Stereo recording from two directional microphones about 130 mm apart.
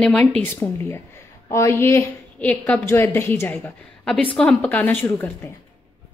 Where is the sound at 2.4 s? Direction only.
10° left (ahead or behind).